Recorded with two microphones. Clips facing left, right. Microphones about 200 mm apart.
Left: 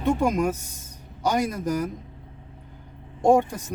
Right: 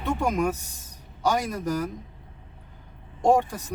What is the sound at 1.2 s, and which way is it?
Speech, 15° left (ahead or behind).